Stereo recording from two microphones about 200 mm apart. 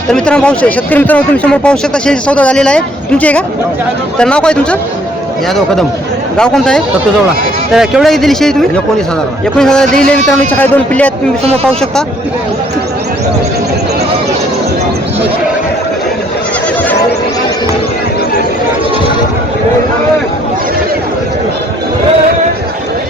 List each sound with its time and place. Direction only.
0.1 s speech: 5° left (ahead or behind)
6.3 s a man's voice: 5° left (ahead or behind)
11.4 s speech: 30° right (ahead or behind)